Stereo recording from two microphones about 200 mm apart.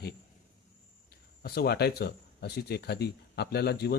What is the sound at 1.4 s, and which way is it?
Speech, 50° left (ahead or behind).